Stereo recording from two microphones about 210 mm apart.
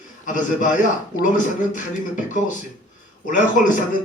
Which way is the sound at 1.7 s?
35° left (ahead or behind).